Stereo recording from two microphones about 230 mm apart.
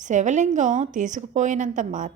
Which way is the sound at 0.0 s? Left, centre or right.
Right.